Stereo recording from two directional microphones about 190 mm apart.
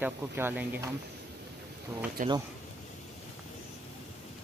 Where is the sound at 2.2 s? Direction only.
45° right (ahead or behind).